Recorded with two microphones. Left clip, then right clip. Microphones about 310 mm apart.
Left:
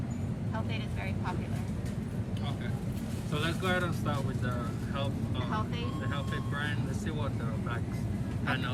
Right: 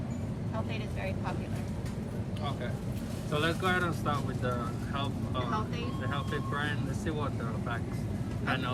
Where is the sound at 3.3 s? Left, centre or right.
Centre.